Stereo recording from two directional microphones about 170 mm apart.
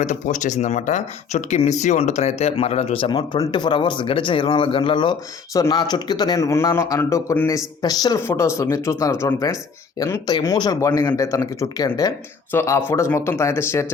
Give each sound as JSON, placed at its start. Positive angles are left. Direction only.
{"t": 0.0, "sound": "speech", "side_deg": 45}